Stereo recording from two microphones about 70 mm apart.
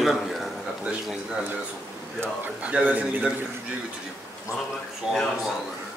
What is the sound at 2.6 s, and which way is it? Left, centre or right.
Speech, centre.